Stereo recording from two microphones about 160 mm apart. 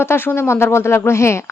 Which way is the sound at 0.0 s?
15° left (ahead or behind).